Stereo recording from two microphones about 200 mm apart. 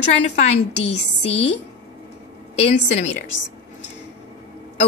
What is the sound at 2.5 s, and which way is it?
Speech, 35° left (ahead or behind).